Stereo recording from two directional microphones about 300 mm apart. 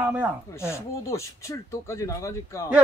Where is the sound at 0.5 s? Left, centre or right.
Centre.